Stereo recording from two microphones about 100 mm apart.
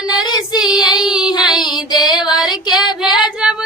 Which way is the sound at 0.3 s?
45° left (ahead or behind).